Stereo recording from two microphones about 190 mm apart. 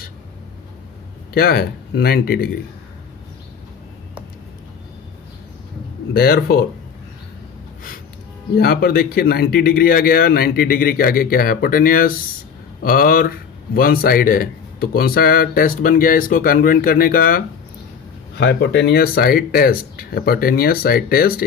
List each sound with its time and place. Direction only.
1.3 s a man's voice: 55° left (ahead or behind)
6.1 s a man's voice: 55° left (ahead or behind)
8.5 s a man's voice: 55° left (ahead or behind)
18.3 s a man's voice: 65° left (ahead or behind)